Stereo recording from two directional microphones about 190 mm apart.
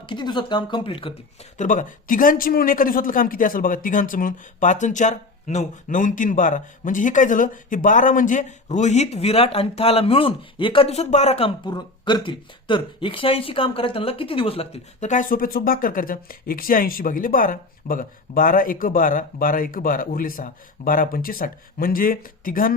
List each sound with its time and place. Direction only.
0.0 s speech: 25° left (ahead or behind)
1.5 s speech: 40° left (ahead or behind)